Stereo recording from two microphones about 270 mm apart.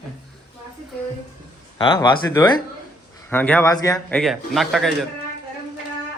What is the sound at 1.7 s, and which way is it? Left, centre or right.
A man's voice, centre.